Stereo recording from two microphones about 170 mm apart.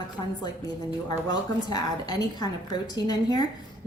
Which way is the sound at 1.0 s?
25° left (ahead or behind).